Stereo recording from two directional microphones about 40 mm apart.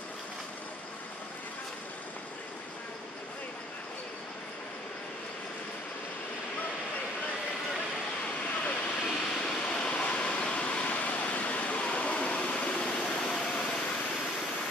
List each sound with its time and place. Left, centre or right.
8.6 s vehicle: left
9.5 s vehicle: centre
10.0 s a sound: left